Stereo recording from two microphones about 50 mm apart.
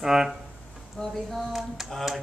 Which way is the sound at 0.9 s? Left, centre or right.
Centre.